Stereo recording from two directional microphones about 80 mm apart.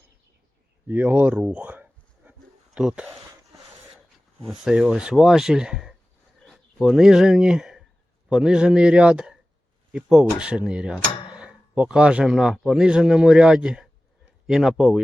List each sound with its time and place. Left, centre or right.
0.9 s speech: right
1.4 s a sound: centre
2.7 s a man's voice: centre
4.4 s a man's voice: centre
11.3 s a sound: centre
12.6 s a man's voice: centre